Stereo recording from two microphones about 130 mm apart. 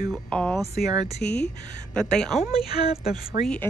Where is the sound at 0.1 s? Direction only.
5° left (ahead or behind).